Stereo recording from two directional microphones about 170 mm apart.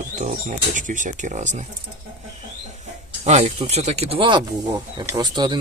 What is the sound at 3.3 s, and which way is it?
Speech, 40° right (ahead or behind).